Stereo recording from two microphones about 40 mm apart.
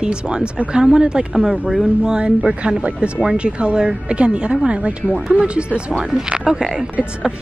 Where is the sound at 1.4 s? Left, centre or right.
Centre.